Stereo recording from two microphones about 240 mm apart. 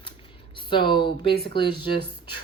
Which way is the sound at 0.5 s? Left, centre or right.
Centre.